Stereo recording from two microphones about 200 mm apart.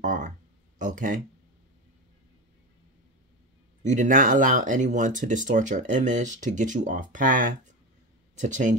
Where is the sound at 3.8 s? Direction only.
35° right (ahead or behind).